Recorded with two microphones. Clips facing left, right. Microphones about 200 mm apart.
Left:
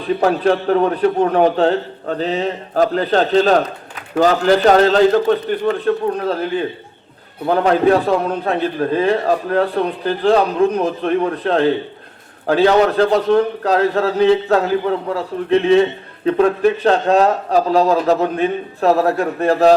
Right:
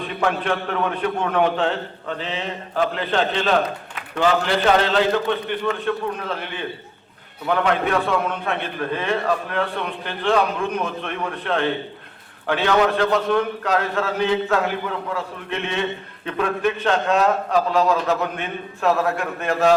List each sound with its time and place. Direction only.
0.0 s a man's voice: 35° left (ahead or behind)